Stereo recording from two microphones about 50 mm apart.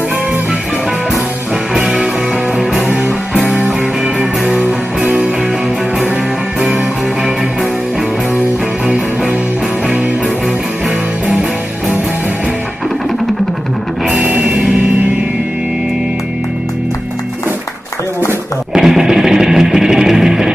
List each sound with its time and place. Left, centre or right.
1.7 s music: centre
4.5 s music: centre
14.2 s music: right
18.7 s music: centre